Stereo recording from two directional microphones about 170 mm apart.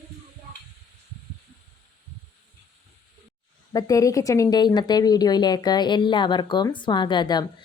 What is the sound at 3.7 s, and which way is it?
A woman's voice, 20° left (ahead or behind).